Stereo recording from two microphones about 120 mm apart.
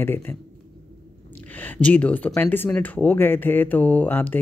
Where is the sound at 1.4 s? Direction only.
15° left (ahead or behind).